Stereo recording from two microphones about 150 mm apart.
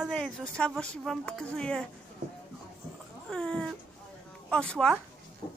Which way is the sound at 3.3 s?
5° left (ahead or behind).